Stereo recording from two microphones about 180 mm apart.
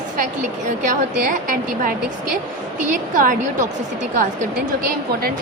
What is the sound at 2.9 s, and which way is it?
Speech, 45° right (ahead or behind).